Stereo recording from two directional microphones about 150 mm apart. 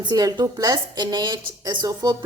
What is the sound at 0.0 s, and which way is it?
A woman's voice, 25° right (ahead or behind).